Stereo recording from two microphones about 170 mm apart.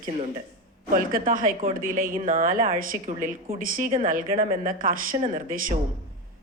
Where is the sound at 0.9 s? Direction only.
55° right (ahead or behind).